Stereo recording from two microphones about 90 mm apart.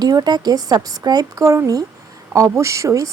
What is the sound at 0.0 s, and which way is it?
A woman's voice, 45° right (ahead or behind).